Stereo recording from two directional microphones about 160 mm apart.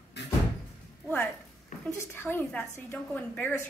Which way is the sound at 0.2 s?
90° left.